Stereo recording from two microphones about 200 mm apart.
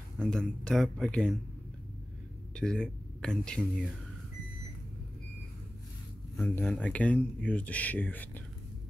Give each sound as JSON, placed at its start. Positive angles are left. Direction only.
{"t": 0.2, "sound": "speech", "side_deg": 5}
{"t": 2.5, "sound": "speech", "side_deg": 5}
{"t": 6.4, "sound": "speech", "side_deg": 10}